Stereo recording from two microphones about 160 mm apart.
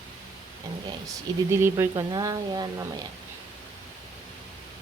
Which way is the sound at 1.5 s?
15° right (ahead or behind).